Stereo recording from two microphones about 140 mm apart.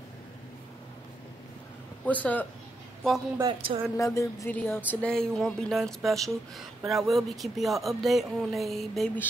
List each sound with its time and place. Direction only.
2.0 s speech: 10° left (ahead or behind)
3.4 s speech: 40° right (ahead or behind)
3.9 s speech: 20° left (ahead or behind); by 9.1 s centre (ahead or behind)